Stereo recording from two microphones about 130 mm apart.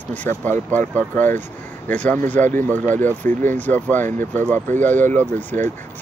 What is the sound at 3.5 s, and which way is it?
Speech, 15° left (ahead or behind).